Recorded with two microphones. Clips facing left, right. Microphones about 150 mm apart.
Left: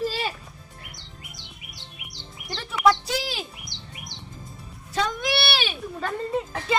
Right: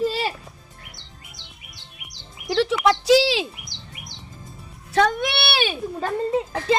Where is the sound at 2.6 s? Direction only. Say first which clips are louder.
Right 2 dB; 90° right.